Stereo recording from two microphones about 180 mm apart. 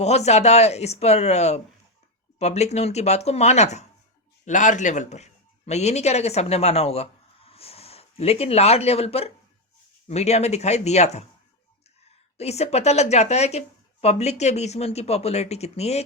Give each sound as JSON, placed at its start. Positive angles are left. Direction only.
{"t": 0.0, "sound": "speech", "side_deg": 40}
{"t": 12.4, "sound": "speech", "side_deg": 35}